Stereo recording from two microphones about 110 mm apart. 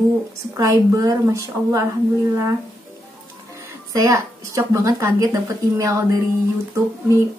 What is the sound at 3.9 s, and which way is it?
A woman's voice, 30° right (ahead or behind).